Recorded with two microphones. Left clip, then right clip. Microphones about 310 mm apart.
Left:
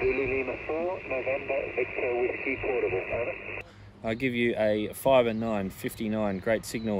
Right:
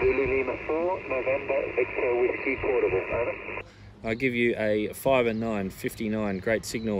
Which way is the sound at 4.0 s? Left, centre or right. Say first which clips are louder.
Right 2 dB; centre.